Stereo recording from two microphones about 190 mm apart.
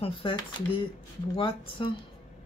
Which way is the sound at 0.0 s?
25° left (ahead or behind).